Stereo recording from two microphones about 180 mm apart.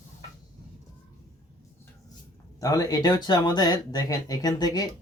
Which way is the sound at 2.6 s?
20° left (ahead or behind).